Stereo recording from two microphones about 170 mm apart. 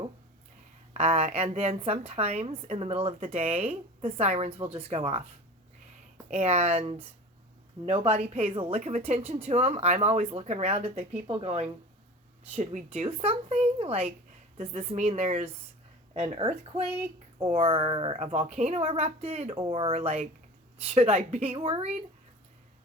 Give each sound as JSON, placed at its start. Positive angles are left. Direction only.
{"t": 0.9, "sound": "a woman's voice", "side_deg": -40}
{"t": 6.3, "sound": "a woman's voice", "side_deg": -40}